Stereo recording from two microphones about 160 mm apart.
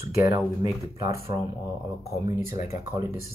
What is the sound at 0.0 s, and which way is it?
Speech, 20° right (ahead or behind).